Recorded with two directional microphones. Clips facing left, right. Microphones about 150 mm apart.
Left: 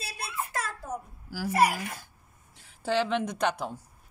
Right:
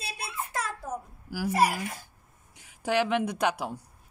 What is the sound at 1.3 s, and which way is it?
Speech, 15° right (ahead or behind).